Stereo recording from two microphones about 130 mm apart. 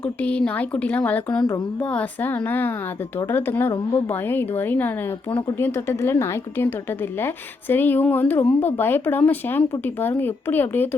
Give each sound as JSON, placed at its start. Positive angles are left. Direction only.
{"t": 0.0, "sound": "a woman's voice", "side_deg": 10}